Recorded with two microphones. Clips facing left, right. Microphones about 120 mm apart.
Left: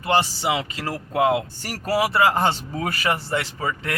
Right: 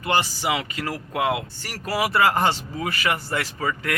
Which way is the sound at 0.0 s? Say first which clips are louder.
Left 2 dB; 30° left (ahead or behind).